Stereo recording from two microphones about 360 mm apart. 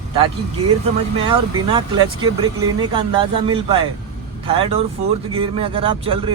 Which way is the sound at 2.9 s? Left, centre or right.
Centre.